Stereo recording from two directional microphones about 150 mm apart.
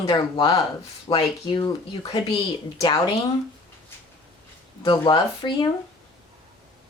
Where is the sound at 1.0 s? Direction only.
30° left (ahead or behind).